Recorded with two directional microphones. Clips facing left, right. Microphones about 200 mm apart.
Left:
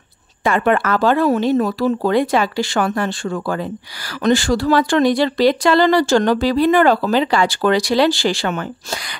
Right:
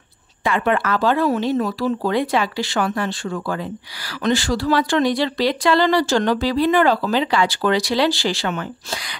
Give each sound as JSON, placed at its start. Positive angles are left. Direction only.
{"t": 0.4, "sound": "speech", "side_deg": 45}